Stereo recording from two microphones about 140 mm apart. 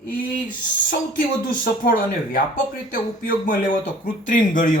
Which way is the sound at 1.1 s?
80° left.